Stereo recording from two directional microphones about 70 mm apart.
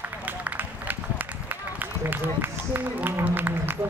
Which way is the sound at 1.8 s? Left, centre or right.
Right.